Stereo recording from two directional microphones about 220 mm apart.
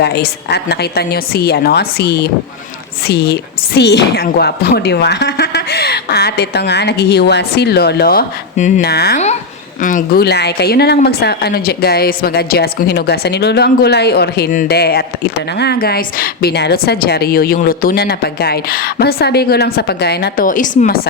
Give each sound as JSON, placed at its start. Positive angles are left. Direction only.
{"t": 0.0, "sound": "speech", "side_deg": 45}